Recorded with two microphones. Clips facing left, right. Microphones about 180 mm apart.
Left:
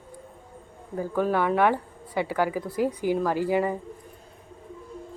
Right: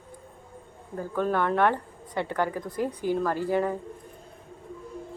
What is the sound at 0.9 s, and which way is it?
Speech, 10° left (ahead or behind).